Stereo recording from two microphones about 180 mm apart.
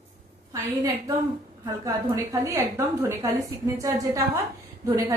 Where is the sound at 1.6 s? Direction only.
20° right (ahead or behind).